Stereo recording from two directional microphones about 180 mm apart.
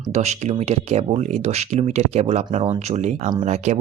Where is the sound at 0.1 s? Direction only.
40° right (ahead or behind).